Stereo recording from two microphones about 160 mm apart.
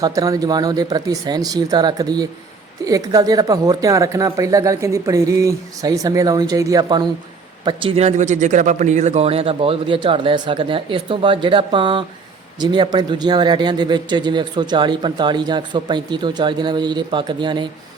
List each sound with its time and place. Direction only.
0.0 s a man's voice: 20° right (ahead or behind)